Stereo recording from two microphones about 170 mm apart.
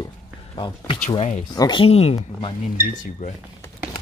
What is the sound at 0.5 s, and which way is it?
Speech, 25° left (ahead or behind).